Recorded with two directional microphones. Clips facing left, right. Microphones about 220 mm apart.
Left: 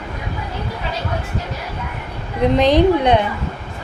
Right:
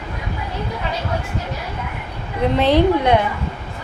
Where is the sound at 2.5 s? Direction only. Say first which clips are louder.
Left 1 dB; 15° left (ahead or behind).